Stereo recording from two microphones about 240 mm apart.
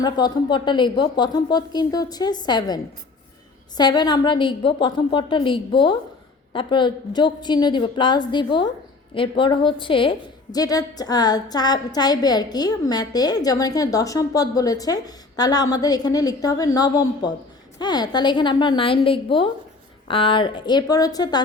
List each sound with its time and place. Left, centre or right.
0.0 s a woman's voice: centre